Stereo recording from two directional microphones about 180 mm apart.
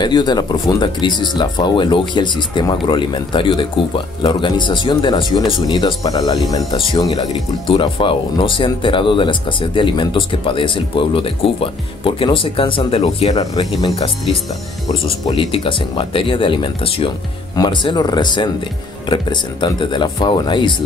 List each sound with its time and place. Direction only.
0.0 s speech: 25° left (ahead or behind)
15.2 s speech: 30° left (ahead or behind)